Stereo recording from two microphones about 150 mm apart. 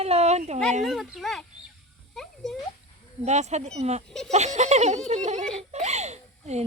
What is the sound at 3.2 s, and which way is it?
Speech, 50° right (ahead or behind).